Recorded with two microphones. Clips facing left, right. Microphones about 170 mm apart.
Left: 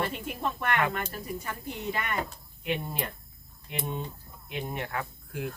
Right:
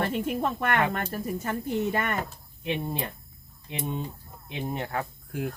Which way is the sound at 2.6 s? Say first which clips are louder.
Right 2 dB; 30° right (ahead or behind).